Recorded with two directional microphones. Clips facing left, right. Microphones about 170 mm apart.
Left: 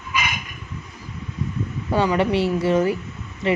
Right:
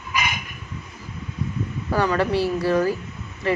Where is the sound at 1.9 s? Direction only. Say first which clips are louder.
Left 1 dB; 20° left (ahead or behind).